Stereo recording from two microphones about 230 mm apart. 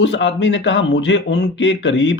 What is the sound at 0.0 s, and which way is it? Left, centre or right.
Speech, left.